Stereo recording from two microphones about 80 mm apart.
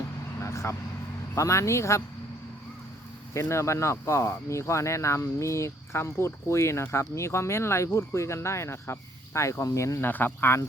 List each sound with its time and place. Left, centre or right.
0.3 s vehicle: left
1.4 s speech: left
3.3 s speech: left
10.0 s speech: left